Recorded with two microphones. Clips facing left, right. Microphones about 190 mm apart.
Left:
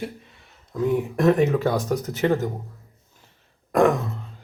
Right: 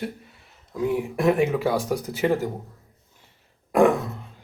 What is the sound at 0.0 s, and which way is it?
Speech, centre (ahead or behind).